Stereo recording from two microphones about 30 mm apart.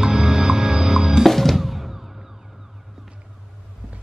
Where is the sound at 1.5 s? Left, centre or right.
Centre.